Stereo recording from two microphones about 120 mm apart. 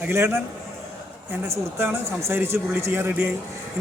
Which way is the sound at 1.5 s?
20° right (ahead or behind).